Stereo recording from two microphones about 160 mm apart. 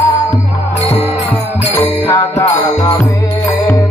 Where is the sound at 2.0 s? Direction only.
20° left (ahead or behind).